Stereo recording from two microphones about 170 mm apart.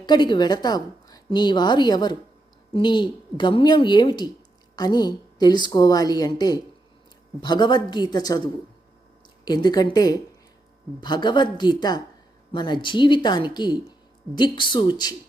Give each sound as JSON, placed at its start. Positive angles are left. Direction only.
{"t": 0.0, "sound": "a woman's voice", "side_deg": 25}
{"t": 9.4, "sound": "a woman's voice", "side_deg": 25}